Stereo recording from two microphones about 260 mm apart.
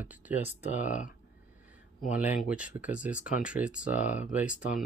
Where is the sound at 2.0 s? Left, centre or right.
Centre.